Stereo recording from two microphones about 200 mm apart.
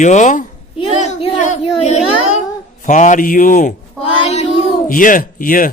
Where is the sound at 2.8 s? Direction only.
40° left (ahead or behind).